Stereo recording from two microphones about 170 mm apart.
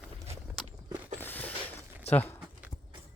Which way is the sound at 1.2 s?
10° left (ahead or behind).